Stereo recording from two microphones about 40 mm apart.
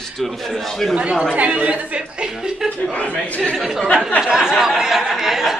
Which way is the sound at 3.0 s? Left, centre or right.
Left.